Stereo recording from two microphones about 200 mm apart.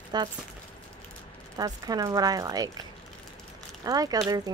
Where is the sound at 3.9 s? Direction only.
20° right (ahead or behind).